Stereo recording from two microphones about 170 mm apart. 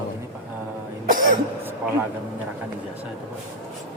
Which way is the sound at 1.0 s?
55° right (ahead or behind).